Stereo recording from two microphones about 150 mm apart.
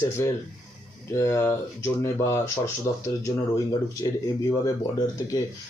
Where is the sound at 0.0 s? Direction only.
20° left (ahead or behind).